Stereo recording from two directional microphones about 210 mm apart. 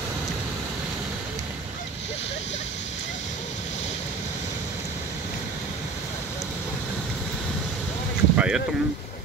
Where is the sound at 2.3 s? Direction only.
30° left (ahead or behind).